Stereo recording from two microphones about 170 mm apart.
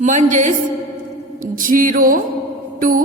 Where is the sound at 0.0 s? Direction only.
45° right (ahead or behind).